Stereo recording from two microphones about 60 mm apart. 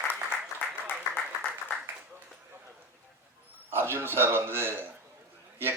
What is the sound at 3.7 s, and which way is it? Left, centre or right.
A man's voice, right.